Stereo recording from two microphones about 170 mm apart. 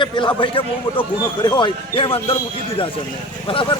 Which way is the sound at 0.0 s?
30° left (ahead or behind).